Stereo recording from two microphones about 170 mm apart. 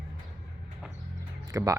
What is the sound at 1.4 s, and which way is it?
Speech, 20° right (ahead or behind).